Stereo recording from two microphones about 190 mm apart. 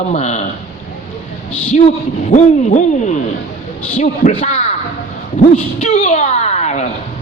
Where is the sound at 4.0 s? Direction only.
40° left (ahead or behind).